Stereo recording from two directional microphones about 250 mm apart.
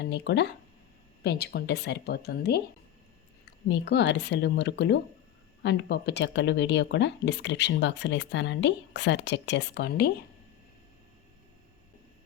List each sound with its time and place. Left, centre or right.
0.0 s a woman's voice: left
3.7 s speech: left